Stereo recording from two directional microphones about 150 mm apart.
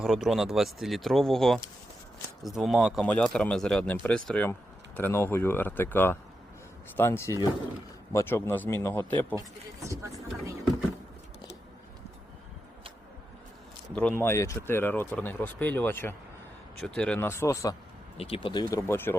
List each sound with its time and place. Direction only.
0.0 s speech: 5° right (ahead or behind); by 9.0 s 15° left (ahead or behind)
9.8 s speech: 20° right (ahead or behind)
13.9 s speech: 10° left (ahead or behind)
18.2 s speech: 35° left (ahead or behind); by 19.1 s 15° left (ahead or behind)